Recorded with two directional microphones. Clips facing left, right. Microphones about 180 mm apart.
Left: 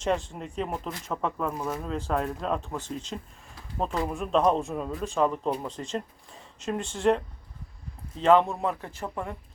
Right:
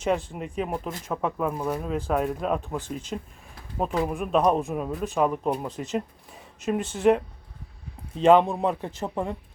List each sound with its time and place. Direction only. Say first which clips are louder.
0.3 s speech: right 3 dB; 5° right (ahead or behind)
8.2 s speech: right 3 dB; 15° right (ahead or behind)